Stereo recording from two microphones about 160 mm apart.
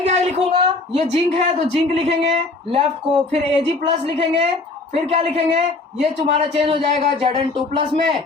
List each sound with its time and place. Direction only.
0.0 s a woman's voice: 45° right (ahead or behind)